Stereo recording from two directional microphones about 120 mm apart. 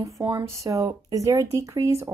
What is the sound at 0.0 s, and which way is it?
Speech, 25° right (ahead or behind).